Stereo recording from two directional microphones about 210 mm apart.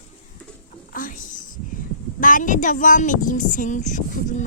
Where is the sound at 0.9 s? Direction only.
40° left (ahead or behind).